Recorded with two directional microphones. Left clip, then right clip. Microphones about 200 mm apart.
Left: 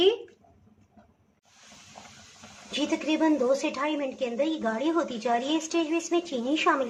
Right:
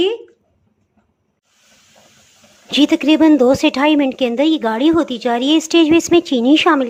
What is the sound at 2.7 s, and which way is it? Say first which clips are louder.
Speech: right 15 dB; 45° right (ahead or behind).